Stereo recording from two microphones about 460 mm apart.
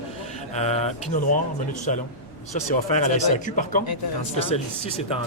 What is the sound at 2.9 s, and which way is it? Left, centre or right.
Speech, centre.